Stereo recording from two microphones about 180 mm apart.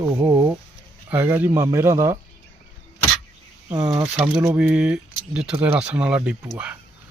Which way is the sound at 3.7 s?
20° right (ahead or behind).